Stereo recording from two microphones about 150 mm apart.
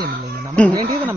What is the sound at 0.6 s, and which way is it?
Speech, 10° left (ahead or behind).